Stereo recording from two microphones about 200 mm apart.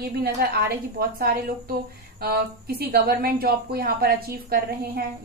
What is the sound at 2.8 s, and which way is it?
A woman's voice, 50° right (ahead or behind).